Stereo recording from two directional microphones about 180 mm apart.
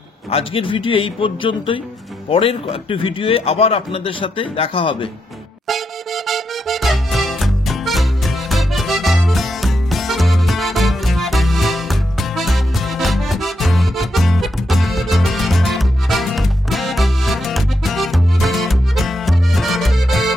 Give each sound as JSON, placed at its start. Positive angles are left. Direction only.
{"t": 0.3, "sound": "a man's voice", "side_deg": 30}
{"t": 5.7, "sound": "music", "side_deg": 0}